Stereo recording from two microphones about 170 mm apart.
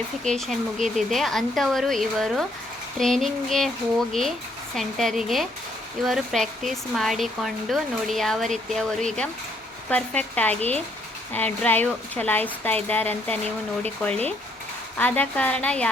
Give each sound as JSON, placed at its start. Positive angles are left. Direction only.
{"t": 0.3, "sound": "a woman's voice", "side_deg": 0}